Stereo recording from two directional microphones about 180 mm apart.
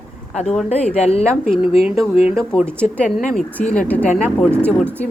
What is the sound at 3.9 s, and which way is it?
Speech, 5° left (ahead or behind).